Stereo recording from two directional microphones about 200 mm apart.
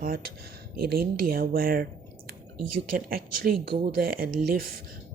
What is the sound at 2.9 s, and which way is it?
A woman's voice, 45° right (ahead or behind).